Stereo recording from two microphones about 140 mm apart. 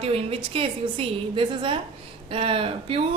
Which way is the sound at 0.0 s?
40° right (ahead or behind).